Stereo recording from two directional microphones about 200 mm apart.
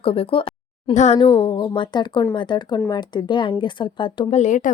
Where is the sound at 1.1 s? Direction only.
20° left (ahead or behind).